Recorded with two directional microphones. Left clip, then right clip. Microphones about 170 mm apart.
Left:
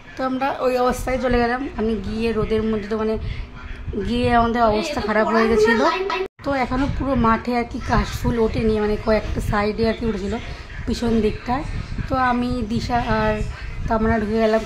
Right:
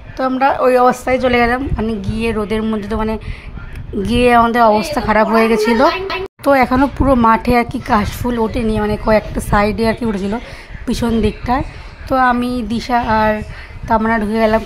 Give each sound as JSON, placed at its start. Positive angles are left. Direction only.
{"t": 0.2, "sound": "speech", "side_deg": -30}
{"t": 6.4, "sound": "speech", "side_deg": -45}